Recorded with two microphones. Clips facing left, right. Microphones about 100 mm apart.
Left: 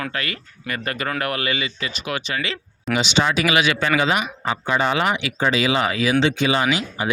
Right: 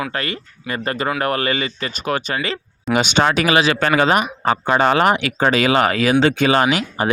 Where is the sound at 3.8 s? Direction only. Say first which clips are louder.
Right 4 dB; 50° right (ahead or behind).